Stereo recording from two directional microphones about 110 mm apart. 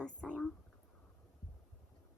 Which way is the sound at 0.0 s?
10° left (ahead or behind).